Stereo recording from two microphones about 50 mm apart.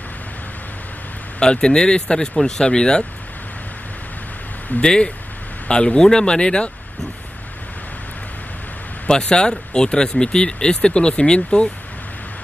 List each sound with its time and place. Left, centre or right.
1.4 s speech: centre
4.8 s speech: left
9.0 s speech: centre